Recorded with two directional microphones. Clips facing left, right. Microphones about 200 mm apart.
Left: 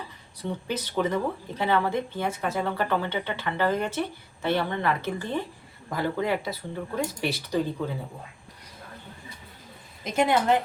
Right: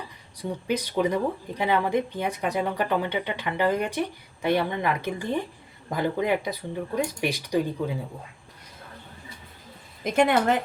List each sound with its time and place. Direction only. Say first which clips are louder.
0.3 s speech: right 3 dB; 15° right (ahead or behind)
10.0 s a woman's voice: right 3 dB; 55° right (ahead or behind)